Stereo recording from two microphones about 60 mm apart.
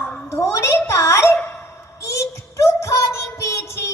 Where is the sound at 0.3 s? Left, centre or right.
Left.